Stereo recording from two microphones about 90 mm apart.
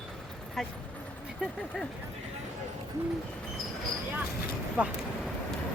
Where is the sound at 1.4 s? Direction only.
10° right (ahead or behind).